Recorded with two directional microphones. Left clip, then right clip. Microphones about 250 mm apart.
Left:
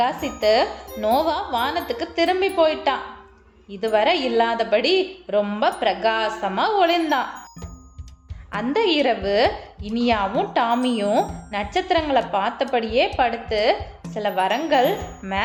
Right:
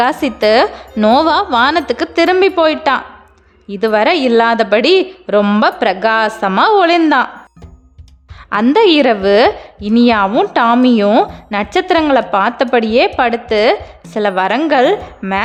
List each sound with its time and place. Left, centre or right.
0.0 s a woman's voice: right
8.4 s a woman's voice: right